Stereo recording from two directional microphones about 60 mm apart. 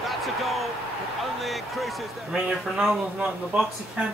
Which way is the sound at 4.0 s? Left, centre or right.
Right.